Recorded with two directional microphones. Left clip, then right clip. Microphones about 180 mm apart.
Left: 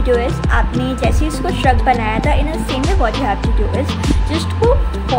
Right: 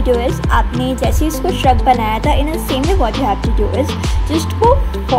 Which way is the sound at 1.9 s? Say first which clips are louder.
Right 2 dB; 20° right (ahead or behind).